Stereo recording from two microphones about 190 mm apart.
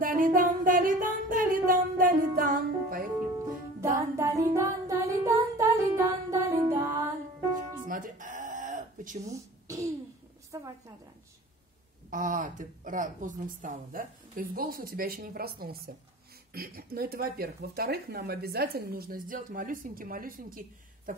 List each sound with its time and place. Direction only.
0.0 s music: 45° right (ahead or behind)
4.2 s music: 15° right (ahead or behind)
7.8 s music: 45° right (ahead or behind)
9.3 s throat clearing: 15° right (ahead or behind)
10.5 s a sound: 20° right (ahead or behind)
12.1 s speech: 45° right (ahead or behind)